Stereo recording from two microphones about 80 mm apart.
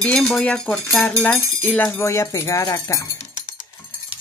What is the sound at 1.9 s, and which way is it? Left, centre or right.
Speech, left.